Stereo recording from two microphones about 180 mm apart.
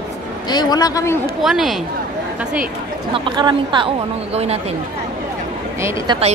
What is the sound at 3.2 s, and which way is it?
A woman's voice, 25° right (ahead or behind).